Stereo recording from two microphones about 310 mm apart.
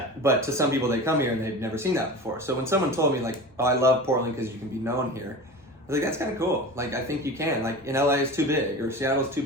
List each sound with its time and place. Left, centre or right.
0.2 s speech: centre
5.9 s speech: centre